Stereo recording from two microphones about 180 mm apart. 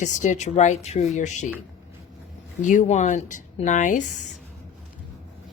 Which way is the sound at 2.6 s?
45° left (ahead or behind).